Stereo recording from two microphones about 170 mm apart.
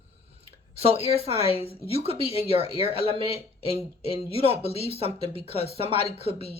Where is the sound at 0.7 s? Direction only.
35° right (ahead or behind).